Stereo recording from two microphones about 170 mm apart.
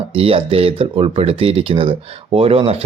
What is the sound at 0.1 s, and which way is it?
Speech, 35° right (ahead or behind).